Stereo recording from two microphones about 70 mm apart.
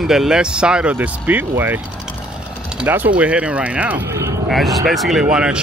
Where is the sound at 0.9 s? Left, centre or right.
Right.